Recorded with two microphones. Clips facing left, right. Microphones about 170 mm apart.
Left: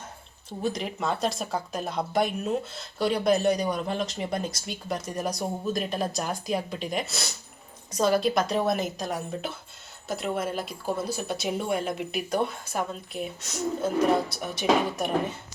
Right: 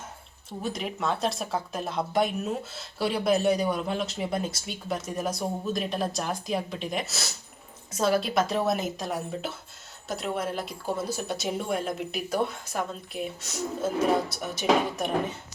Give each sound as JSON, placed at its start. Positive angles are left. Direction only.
{"t": 0.6, "sound": "speech", "side_deg": 0}